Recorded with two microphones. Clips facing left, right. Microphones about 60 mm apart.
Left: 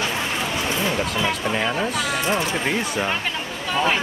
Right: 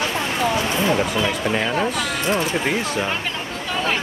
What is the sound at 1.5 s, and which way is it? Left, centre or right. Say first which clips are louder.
Speech: right 2 dB; centre.